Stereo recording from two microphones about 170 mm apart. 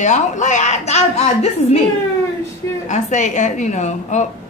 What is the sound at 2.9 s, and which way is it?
A woman's voice, 45° left (ahead or behind).